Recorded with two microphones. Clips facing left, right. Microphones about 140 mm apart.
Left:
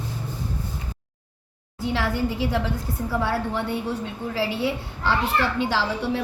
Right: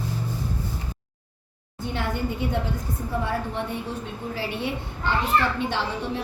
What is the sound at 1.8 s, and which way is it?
A woman's voice, 90° left.